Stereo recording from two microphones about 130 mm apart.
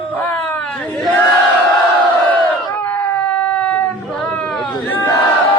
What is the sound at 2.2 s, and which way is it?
Crowd, 10° left (ahead or behind).